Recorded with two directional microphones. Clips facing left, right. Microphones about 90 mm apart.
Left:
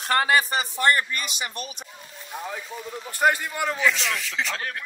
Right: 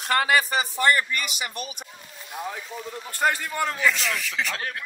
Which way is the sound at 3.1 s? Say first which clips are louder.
Left 3 dB; 15° left (ahead or behind).